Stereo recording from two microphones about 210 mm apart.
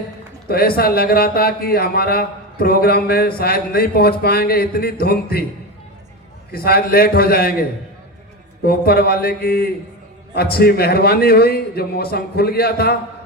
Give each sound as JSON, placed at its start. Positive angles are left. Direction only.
{"t": 0.4, "sound": "a man's voice", "side_deg": 45}
{"t": 6.5, "sound": "a man's voice", "side_deg": 45}
{"t": 8.6, "sound": "a man's voice", "side_deg": 45}